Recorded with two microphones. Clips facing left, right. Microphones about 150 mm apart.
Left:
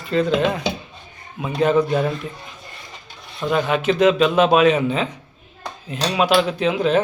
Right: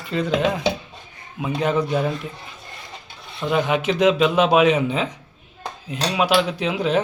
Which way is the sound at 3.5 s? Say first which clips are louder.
Left 1 dB; 15° right (ahead or behind).